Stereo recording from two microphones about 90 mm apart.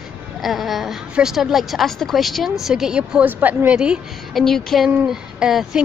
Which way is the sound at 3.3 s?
20° right (ahead or behind).